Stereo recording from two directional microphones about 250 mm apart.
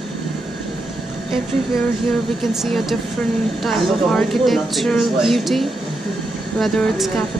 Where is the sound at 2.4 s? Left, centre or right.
Centre.